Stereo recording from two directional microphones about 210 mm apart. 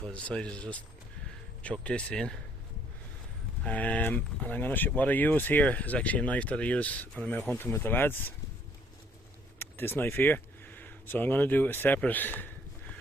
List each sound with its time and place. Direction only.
0.0 s speech: 5° left (ahead or behind)
3.6 s speech: 5° left (ahead or behind)
9.6 s speech: 10° left (ahead or behind)